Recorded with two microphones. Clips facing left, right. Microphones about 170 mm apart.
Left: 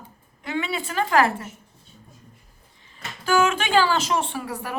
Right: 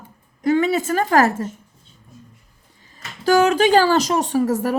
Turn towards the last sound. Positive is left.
turn(degrees=-40)  # may be behind; listen again after turning